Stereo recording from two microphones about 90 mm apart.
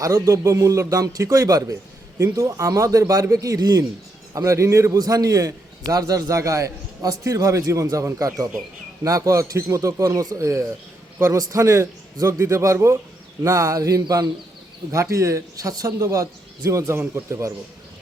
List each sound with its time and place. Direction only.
0.0 s a man's voice: 35° right (ahead or behind)
4.9 s a man's voice: 45° right (ahead or behind)